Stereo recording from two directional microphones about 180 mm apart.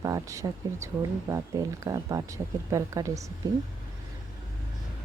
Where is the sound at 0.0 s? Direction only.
20° right (ahead or behind).